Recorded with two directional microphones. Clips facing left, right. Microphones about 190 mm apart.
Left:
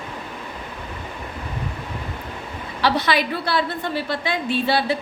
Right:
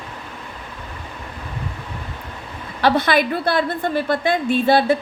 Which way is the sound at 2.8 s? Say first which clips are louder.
Right 4 dB; 50° right (ahead or behind).